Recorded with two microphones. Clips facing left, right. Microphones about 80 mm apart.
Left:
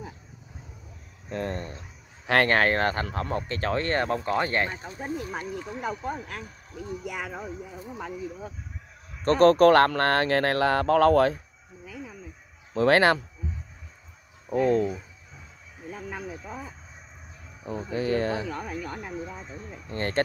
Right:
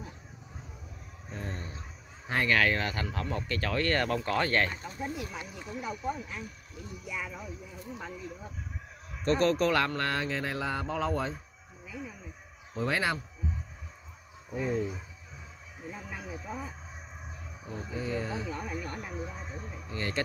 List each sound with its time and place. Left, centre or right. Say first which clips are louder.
1.3 s speech: left 9 dB; left
2.5 s speech: left 5 dB; left
4.7 s speech: left 3 dB; left
7.1 s speech: left 1 dB; left
7.8 s speech: left 5 dB; left
9.2 s speech: left 9 dB; left
12.7 s speech: left 10 dB; left
14.5 s speech: left 9 dB; left
17.8 s speech: left 8 dB; left
19.9 s speech: left 5 dB; left